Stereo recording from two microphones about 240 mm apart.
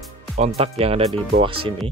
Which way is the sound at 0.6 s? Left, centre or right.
Right.